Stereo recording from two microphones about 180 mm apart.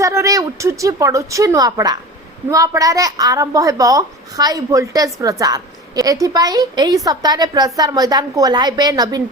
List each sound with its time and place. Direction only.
0.0 s a woman's voice: 15° right (ahead or behind)